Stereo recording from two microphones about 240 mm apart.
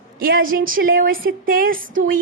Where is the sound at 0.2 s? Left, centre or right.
Right.